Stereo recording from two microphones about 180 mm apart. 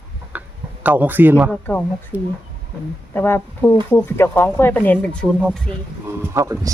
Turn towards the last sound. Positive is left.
turn(degrees=-20)  # may be behind; listen again after turning